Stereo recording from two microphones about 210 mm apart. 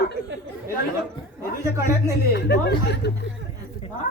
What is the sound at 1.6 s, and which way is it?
Speech, 15° right (ahead or behind).